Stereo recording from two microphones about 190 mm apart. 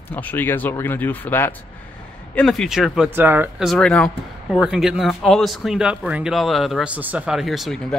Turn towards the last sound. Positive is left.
turn(degrees=5)  # may be behind; listen again after turning